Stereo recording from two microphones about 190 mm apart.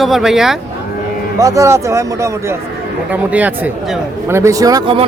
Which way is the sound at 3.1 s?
10° right (ahead or behind).